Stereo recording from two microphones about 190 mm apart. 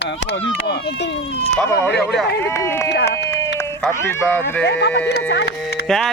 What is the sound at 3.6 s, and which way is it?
Speech, 10° left (ahead or behind).